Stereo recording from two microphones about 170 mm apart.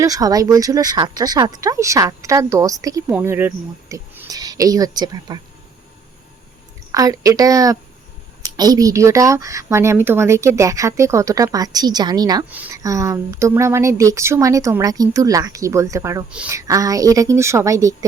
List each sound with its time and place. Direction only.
0.0 s speech: 20° right (ahead or behind)
6.9 s speech: 20° right (ahead or behind)
16.3 s speech: 5° right (ahead or behind)
16.6 s speech: 20° right (ahead or behind)